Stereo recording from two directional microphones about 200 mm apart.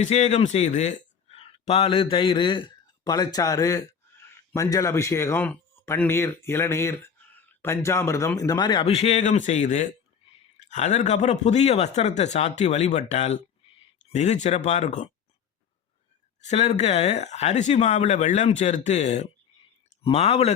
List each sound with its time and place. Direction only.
0.0 s a man's voice: 35° left (ahead or behind)
16.4 s speech: 35° left (ahead or behind)